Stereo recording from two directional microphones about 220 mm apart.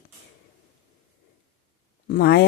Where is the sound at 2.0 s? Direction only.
45° left (ahead or behind).